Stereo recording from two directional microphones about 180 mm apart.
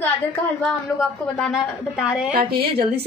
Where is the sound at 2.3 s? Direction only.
60° right (ahead or behind).